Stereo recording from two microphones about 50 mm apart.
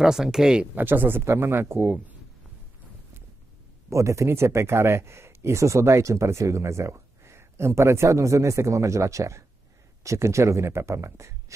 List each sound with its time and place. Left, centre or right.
0.0 s speech: centre
0.7 s speech: right
3.9 s speech: right
4.3 s speech: right